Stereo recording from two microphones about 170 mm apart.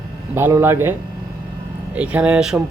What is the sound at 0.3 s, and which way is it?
Speech, 15° right (ahead or behind).